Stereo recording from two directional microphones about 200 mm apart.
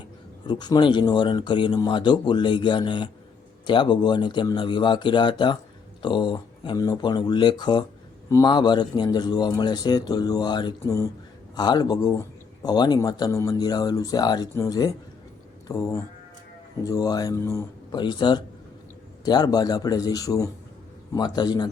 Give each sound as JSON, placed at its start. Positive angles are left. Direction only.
{"t": 0.4, "sound": "speech", "side_deg": 20}